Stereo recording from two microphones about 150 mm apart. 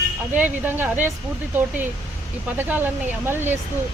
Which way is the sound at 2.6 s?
15° right (ahead or behind).